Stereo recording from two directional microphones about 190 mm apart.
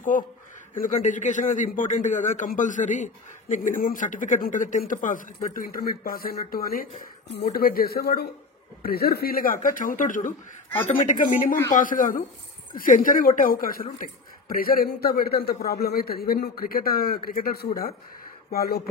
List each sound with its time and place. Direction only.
0.7 s a man's voice: 40° left (ahead or behind)